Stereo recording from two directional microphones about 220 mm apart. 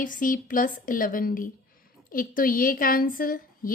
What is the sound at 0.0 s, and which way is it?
A woman's voice, 35° left (ahead or behind).